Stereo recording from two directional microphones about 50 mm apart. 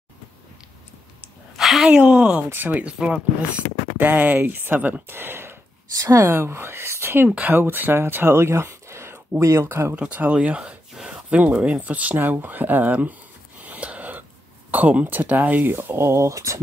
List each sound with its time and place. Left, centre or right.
1.6 s a sound: centre
1.9 s speech: centre
2.5 s speech: right
2.8 s speech: right
4.0 s speech: right
5.1 s speech: right
6.2 s speech: right
9.4 s speech: right
9.9 s speech: right
13.7 s a sound: right
14.7 s speech: right
15.7 s speech: right
16.0 s speech: right